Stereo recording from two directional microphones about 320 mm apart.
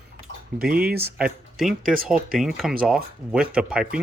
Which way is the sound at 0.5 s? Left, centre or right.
Right.